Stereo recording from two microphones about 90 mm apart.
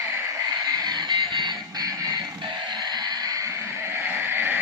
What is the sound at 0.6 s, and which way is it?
Music, 50° right (ahead or behind).